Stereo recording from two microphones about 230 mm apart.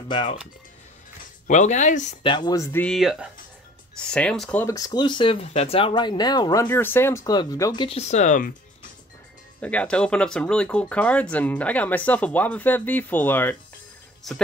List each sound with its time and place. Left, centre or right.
0.1 s speech: left
1.5 s speech: left
2.2 s speech: centre; by 8.5 s left
9.6 s speech: centre